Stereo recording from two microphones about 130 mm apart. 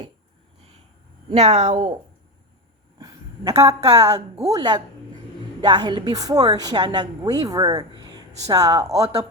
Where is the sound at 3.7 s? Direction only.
30° right (ahead or behind).